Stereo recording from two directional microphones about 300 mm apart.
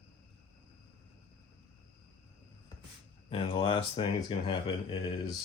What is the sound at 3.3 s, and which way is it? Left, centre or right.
Speech, centre.